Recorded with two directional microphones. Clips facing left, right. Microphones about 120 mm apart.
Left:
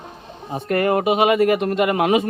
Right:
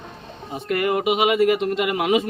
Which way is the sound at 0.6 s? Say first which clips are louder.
Left 3 dB; 40° left (ahead or behind).